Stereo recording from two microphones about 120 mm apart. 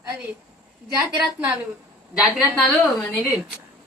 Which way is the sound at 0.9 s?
20° right (ahead or behind).